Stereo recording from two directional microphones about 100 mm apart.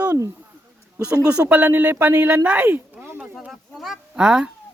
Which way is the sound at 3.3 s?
Centre (ahead or behind).